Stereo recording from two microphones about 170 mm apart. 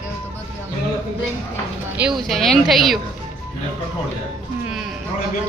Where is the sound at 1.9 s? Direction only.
5° right (ahead or behind).